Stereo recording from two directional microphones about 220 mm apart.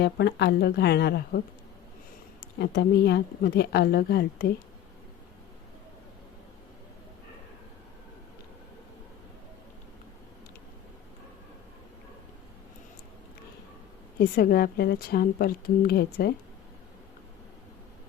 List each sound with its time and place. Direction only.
0.0 s a woman's voice: 50° left (ahead or behind)
2.6 s a woman's voice: 50° left (ahead or behind)
14.2 s a woman's voice: 45° left (ahead or behind)